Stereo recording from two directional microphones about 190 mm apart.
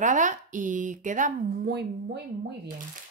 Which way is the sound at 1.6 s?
60° right (ahead or behind).